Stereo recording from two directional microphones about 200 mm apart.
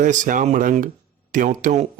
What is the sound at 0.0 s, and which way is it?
Speech, 40° right (ahead or behind).